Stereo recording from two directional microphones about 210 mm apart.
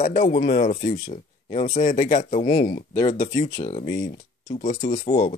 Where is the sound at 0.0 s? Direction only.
35° left (ahead or behind).